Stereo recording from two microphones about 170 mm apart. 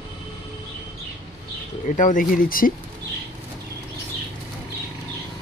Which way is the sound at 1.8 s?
50° left (ahead or behind).